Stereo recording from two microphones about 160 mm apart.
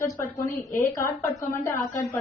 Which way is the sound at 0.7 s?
60° left (ahead or behind).